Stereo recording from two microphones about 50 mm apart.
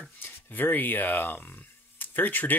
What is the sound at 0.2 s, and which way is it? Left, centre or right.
Speech, left.